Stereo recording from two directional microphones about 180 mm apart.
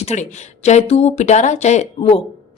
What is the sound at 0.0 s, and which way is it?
A woman's voice, 40° left (ahead or behind).